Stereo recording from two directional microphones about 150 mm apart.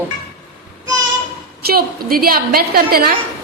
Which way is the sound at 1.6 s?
90° right.